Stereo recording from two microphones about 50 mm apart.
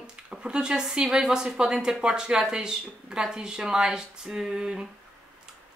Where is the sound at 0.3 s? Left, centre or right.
Centre.